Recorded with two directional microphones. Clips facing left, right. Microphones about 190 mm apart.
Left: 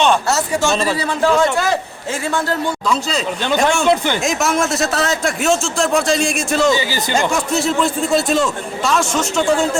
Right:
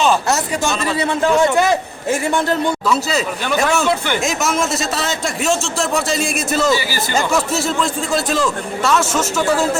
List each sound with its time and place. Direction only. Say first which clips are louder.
0.3 s a man's voice: left 2 dB; 15° right (ahead or behind)
2.8 s a man's voice: right 1 dB; 5° right (ahead or behind)
3.8 s a man's voice: left 3 dB; 15° left (ahead or behind)
4.2 s a man's voice: left 1 dB; centre (ahead or behind)
6.7 s a man's voice: left 1 dB; 20° left (ahead or behind)
7.3 s a man's voice: left 1 dB; centre (ahead or behind)